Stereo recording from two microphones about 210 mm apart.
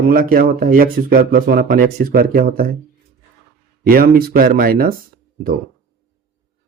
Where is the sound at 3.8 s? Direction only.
45° right (ahead or behind).